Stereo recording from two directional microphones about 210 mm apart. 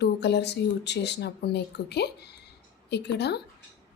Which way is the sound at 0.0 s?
55° left (ahead or behind).